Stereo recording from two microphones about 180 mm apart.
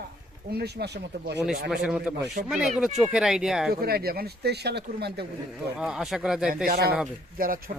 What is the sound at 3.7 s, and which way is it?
Speech, 60° right (ahead or behind).